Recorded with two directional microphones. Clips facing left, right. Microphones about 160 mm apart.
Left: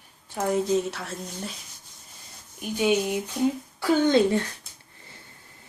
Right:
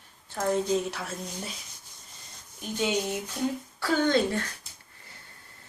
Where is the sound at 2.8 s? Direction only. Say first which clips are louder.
Left 5 dB; 10° left (ahead or behind).